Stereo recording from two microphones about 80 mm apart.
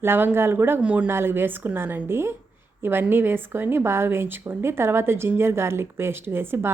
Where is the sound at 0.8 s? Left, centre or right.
Centre.